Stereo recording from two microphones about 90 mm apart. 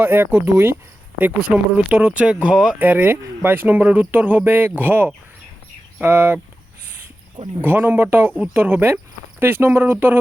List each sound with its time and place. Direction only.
0.0 s speech: 20° right (ahead or behind)
7.6 s speech: 20° right (ahead or behind)